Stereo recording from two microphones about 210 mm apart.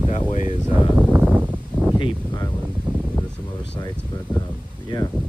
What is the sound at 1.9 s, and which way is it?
Speech, 25° left (ahead or behind).